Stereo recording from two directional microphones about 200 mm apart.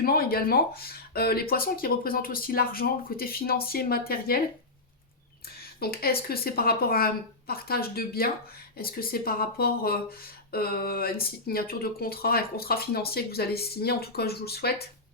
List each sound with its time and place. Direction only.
0.0 s speech: 50° left (ahead or behind)
5.5 s speech: 50° left (ahead or behind)